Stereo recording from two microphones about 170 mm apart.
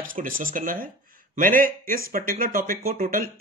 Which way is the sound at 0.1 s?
55° right (ahead or behind).